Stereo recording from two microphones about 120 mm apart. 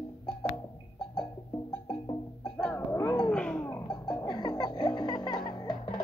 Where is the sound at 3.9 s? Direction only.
40° left (ahead or behind).